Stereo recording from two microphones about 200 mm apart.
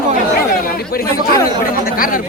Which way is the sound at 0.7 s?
50° left (ahead or behind).